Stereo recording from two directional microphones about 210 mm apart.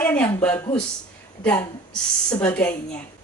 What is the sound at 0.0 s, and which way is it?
Speech, 10° left (ahead or behind).